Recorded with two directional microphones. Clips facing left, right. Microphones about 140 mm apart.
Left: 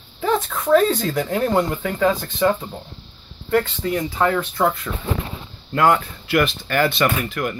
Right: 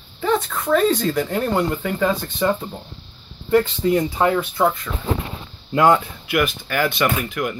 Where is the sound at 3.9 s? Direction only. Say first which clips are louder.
Right 2 dB; 20° right (ahead or behind); by 4.8 s 5° right (ahead or behind).